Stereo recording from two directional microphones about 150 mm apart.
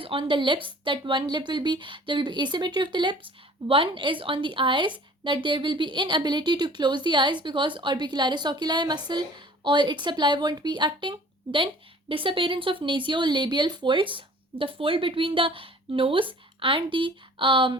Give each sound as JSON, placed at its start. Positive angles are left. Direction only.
{"t": 0.0, "sound": "a woman's voice", "side_deg": -35}